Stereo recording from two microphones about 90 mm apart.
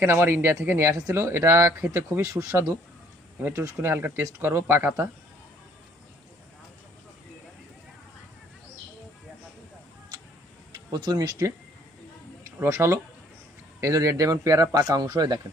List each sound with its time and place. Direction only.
0.0 s speech: 25° right (ahead or behind)
10.9 s speech: 50° right (ahead or behind)
12.6 s speech: 35° right (ahead or behind); by 15.4 s 50° right (ahead or behind)